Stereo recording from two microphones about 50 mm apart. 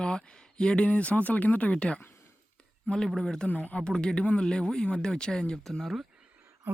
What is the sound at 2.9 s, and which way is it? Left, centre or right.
Speech, centre.